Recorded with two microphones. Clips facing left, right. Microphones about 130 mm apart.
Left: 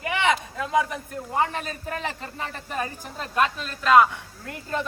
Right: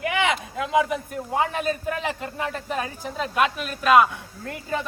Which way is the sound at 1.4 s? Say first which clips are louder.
Right 2 dB; 10° right (ahead or behind).